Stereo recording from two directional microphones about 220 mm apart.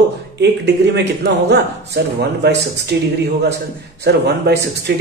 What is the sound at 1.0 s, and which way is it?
Speech, 50° right (ahead or behind).